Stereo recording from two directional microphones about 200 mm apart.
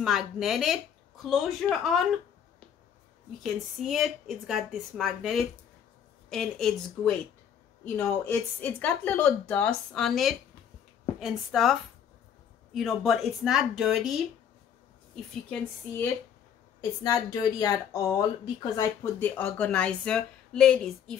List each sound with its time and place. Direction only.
0.0 s speech: centre (ahead or behind)
3.4 s speech: centre (ahead or behind)
12.7 s speech: centre (ahead or behind)
17.0 s speech: 20° left (ahead or behind)
19.1 s speech: 10° left (ahead or behind)